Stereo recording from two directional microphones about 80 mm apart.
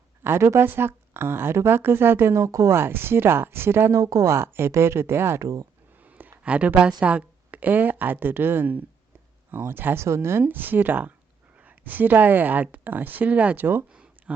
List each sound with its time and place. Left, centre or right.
0.2 s speech: right
4.0 s speech: right
5.4 s speech: right
6.0 s a sound: right
6.4 s speech: centre
13.9 s a sound: centre